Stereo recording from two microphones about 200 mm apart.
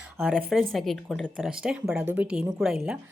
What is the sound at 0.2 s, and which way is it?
Speech, 5° right (ahead or behind).